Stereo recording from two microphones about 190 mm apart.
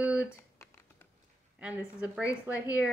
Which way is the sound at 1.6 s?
5° right (ahead or behind).